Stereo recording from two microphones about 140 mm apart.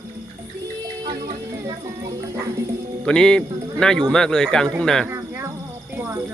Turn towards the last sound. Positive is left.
turn(degrees=5)  # may be behind; listen again after turning